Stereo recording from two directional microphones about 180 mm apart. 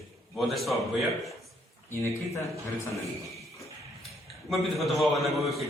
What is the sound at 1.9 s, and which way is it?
A man's voice, 15° left (ahead or behind).